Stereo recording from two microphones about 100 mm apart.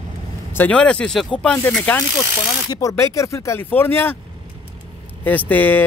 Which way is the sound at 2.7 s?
30° left (ahead or behind).